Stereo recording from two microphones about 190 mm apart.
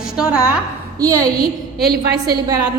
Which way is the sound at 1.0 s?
15° right (ahead or behind).